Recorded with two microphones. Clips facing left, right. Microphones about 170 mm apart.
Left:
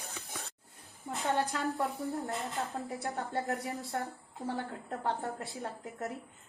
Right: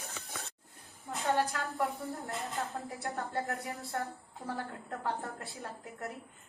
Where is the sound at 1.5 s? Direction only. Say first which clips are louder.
Left 1 dB; 20° left (ahead or behind).